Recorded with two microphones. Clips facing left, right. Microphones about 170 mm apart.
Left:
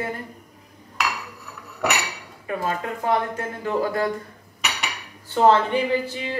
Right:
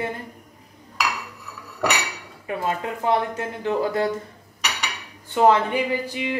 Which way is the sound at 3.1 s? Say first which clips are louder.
Right 1 dB; 25° right (ahead or behind).